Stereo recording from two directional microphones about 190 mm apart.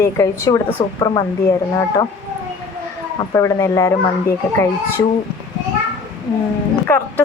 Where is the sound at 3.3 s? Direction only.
15° left (ahead or behind).